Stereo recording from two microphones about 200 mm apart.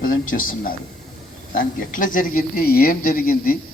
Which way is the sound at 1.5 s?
45° left (ahead or behind).